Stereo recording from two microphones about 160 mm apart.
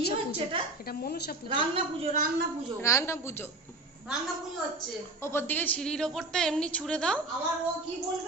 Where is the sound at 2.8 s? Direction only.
20° left (ahead or behind).